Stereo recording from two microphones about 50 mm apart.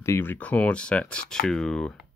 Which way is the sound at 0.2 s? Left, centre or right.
Left.